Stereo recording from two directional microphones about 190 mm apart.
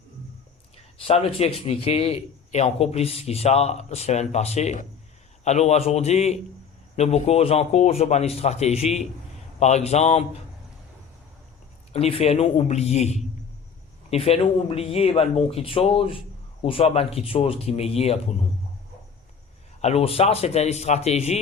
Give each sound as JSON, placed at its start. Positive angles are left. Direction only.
{"t": 1.0, "sound": "a man's voice", "side_deg": 30}
{"t": 11.9, "sound": "a man's voice", "side_deg": 30}
{"t": 19.8, "sound": "a man's voice", "side_deg": 35}